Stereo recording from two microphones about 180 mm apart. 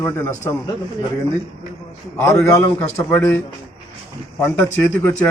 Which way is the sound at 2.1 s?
15° left (ahead or behind).